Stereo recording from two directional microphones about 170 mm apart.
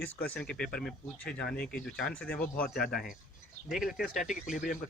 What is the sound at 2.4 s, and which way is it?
Speech, 60° left (ahead or behind).